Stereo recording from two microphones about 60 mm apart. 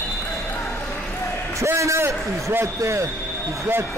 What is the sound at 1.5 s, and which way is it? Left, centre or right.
A man's voice, right.